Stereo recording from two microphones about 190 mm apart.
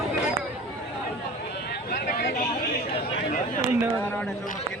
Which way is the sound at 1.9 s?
45° left (ahead or behind).